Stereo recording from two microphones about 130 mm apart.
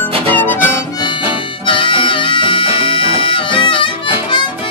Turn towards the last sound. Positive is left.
turn(degrees=40)  # may be behind; listen again after turning